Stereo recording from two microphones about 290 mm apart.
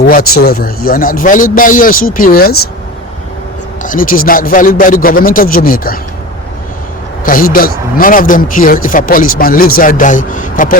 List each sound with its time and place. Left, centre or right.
0.0 s speech: left
3.8 s speech: left
7.3 s speech: left